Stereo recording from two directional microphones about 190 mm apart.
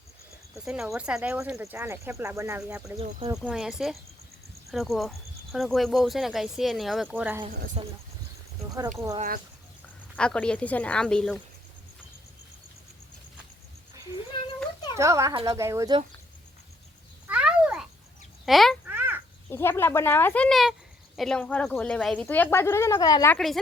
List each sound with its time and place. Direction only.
0.5 s speech: centre (ahead or behind)
3.0 s speech: 30° right (ahead or behind)
3.3 s speech: 5° right (ahead or behind)
7.8 s speech: 25° right (ahead or behind)
10.2 s speech: 5° left (ahead or behind)
14.3 s cat: 25° left (ahead or behind)
14.9 s speech: 15° right (ahead or behind)
17.2 s cat: 5° right (ahead or behind)
18.4 s speech: centre (ahead or behind)
18.9 s bird: 10° right (ahead or behind)
19.5 s speech: 15° left (ahead or behind)
23.3 s speech: centre (ahead or behind)